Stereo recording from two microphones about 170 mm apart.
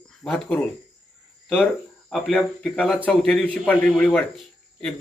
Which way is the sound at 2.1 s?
Centre (ahead or behind).